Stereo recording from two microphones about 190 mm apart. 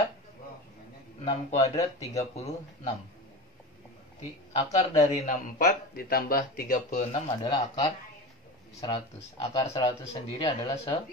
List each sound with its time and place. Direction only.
1.2 s speech: 35° left (ahead or behind)
4.7 s speech: 40° left (ahead or behind)
7.4 s speech: 20° left (ahead or behind)